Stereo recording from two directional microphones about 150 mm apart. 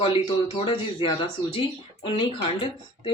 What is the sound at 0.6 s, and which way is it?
Speech, 30° left (ahead or behind).